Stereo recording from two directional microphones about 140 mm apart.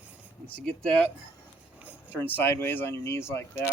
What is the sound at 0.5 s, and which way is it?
Speech, 5° left (ahead or behind).